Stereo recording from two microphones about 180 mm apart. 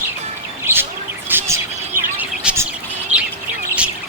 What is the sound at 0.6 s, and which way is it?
Bird, 10° right (ahead or behind).